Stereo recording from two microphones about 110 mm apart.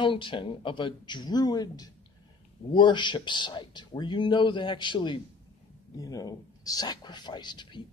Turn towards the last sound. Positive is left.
turn(degrees=40)  # may be behind; listen again after turning